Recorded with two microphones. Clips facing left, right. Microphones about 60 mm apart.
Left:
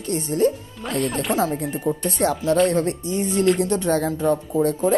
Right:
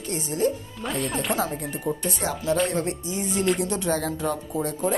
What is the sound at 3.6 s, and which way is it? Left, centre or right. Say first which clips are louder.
Speech: left 5 dB; left.